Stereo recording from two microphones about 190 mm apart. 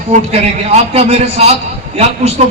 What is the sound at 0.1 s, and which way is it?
A man's voice, 35° right (ahead or behind).